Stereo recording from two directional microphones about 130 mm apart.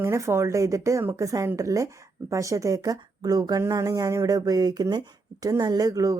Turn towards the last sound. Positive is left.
turn(degrees=-25)  # may be behind; listen again after turning